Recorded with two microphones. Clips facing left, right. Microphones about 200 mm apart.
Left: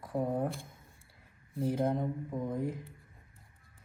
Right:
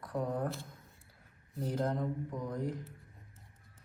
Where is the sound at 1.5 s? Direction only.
Centre (ahead or behind).